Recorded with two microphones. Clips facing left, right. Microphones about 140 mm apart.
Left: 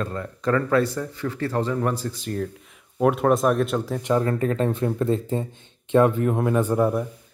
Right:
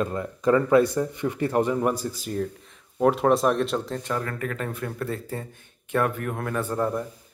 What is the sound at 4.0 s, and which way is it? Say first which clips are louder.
Speech: left 7 dB; 20° left (ahead or behind).